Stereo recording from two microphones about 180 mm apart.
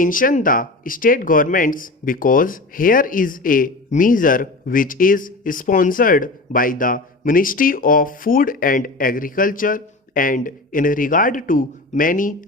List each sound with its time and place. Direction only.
0.0 s speech: 50° left (ahead or behind)